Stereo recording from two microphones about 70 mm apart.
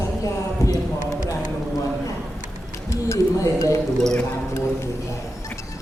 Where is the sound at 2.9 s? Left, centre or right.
Left.